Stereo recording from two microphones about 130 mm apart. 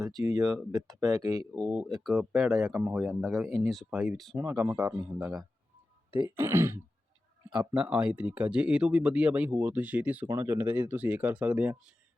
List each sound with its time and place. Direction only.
0.2 s speech: 30° right (ahead or behind)
1.5 s speech: centre (ahead or behind)
4.4 s speech: 15° right (ahead or behind)
6.1 s speech: 40° right (ahead or behind)
6.3 s speech: 15° right (ahead or behind)